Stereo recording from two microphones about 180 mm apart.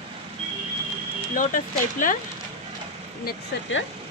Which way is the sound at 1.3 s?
45° left (ahead or behind).